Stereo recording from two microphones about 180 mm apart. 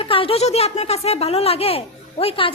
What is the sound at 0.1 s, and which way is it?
A woman's voice, 30° left (ahead or behind).